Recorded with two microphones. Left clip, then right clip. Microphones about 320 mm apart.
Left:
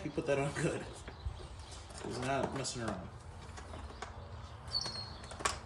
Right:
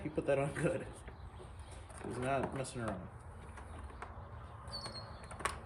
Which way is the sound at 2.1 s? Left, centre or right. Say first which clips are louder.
Left 1 dB; centre.